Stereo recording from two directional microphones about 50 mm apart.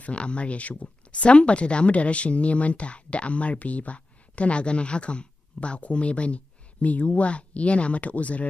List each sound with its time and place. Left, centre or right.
0.0 s speech: left